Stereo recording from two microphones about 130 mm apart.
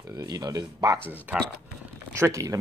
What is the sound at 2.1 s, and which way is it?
Speech, 20° right (ahead or behind).